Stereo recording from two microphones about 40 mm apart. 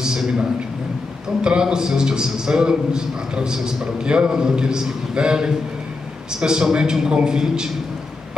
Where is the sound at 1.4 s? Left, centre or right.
Centre.